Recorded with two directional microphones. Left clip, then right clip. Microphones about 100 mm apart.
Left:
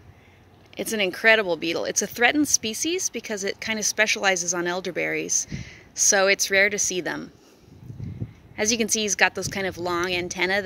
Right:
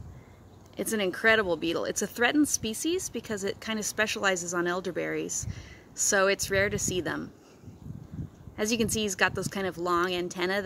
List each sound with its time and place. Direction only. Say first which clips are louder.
0.7 s speech: left 4 dB; 15° left (ahead or behind)
8.5 s speech: left 5 dB; 15° left (ahead or behind)